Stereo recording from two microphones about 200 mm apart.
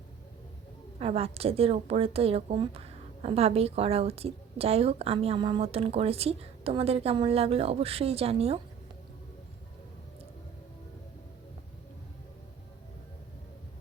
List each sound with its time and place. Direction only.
0.9 s a woman's voice: 30° right (ahead or behind)